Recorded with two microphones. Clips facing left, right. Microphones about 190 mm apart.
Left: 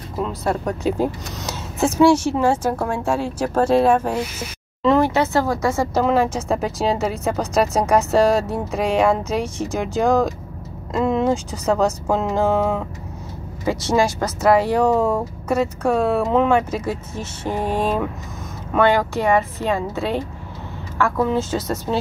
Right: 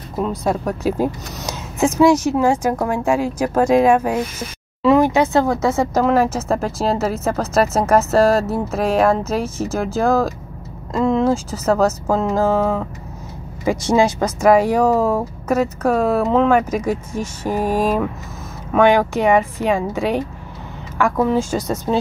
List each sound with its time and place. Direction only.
0.4 s speech: 10° right (ahead or behind)
6.0 s speech: 5° right (ahead or behind)
13.7 s speech: 15° right (ahead or behind)